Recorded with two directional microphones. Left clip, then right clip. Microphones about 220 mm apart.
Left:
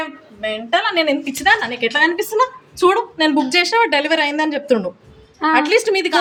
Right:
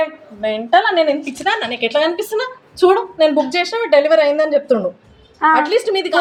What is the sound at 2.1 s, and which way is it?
Speech, 90° left.